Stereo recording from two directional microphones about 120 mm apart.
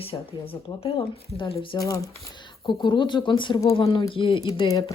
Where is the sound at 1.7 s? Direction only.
30° left (ahead or behind).